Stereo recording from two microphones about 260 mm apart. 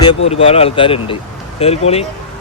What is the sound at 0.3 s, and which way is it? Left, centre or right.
Speech, left.